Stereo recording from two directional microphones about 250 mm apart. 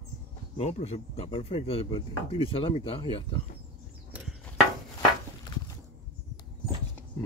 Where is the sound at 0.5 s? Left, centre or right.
Left.